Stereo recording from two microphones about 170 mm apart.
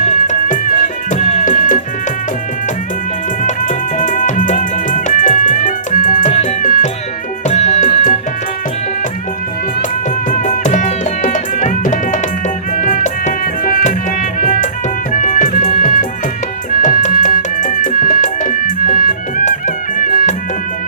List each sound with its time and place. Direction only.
0.0 s music: 45° left (ahead or behind)
3.4 s music: 50° left (ahead or behind)
6.7 s music: 55° left (ahead or behind)
7.4 s music: 40° left (ahead or behind)
10.2 s music: 55° left (ahead or behind)